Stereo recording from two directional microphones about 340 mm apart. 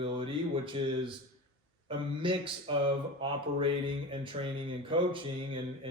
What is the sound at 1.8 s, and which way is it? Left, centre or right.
Speech, centre.